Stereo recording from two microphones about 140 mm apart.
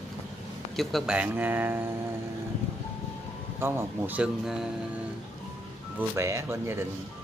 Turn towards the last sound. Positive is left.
turn(degrees=-20)  # may be behind; listen again after turning